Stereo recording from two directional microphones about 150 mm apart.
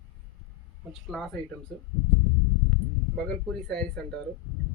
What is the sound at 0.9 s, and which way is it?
Speech, centre (ahead or behind).